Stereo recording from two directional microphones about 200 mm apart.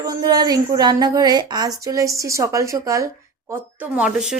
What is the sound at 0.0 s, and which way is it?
A woman's voice, 20° right (ahead or behind).